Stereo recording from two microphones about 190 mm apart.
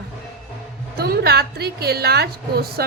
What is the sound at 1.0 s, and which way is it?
A woman's voice, 55° right (ahead or behind).